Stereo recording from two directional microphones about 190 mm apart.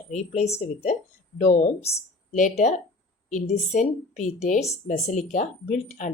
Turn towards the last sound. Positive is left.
turn(degrees=35)  # may be behind; listen again after turning